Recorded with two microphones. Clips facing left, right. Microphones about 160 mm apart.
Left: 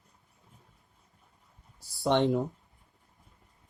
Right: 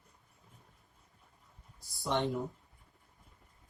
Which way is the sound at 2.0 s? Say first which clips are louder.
Left 8 dB; 70° left (ahead or behind).